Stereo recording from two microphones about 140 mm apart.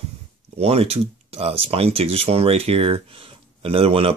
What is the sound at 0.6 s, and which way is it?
Speech, 45° right (ahead or behind).